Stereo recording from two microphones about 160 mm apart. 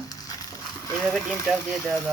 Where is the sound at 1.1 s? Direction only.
5° left (ahead or behind).